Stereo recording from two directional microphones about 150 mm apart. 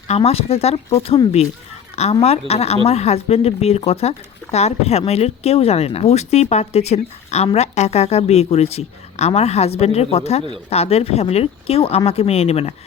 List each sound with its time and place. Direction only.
0.1 s speech: 40° left (ahead or behind)